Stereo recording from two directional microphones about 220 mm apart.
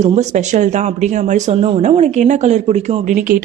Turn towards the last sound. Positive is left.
turn(degrees=-35)  # may be behind; listen again after turning